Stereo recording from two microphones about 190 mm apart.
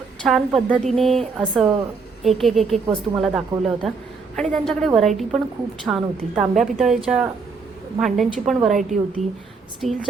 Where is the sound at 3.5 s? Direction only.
25° right (ahead or behind).